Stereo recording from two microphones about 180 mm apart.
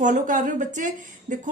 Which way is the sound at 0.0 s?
45° right (ahead or behind).